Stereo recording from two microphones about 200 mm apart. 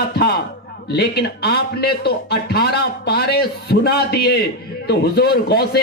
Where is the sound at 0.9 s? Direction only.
55° left (ahead or behind).